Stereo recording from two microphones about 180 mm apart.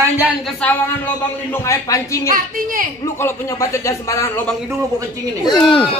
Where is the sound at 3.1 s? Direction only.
15° left (ahead or behind).